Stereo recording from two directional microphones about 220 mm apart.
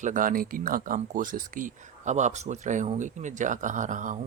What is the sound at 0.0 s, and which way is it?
Speech, 35° right (ahead or behind).